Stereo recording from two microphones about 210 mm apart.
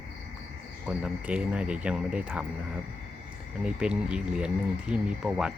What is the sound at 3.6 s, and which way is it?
Speech, 5° right (ahead or behind).